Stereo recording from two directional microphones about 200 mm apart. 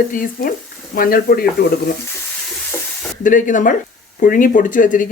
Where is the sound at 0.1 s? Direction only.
45° left (ahead or behind).